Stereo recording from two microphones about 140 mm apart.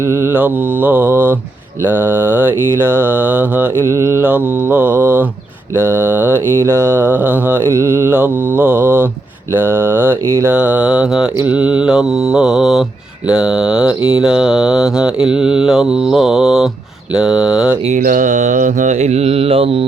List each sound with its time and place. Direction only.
0.2 s mantra: 15° right (ahead or behind)
3.8 s mantra: 25° left (ahead or behind)
4.2 s mantra: 10° right (ahead or behind)
17.8 s mantra: 65° right (ahead or behind); by 19.7 s 45° right (ahead or behind)